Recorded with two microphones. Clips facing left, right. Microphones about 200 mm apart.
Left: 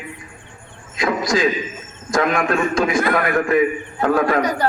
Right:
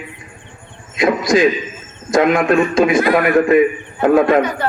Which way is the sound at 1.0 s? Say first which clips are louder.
Right 5 dB; 20° right (ahead or behind).